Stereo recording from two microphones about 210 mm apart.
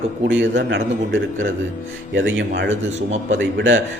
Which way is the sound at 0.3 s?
60° right (ahead or behind).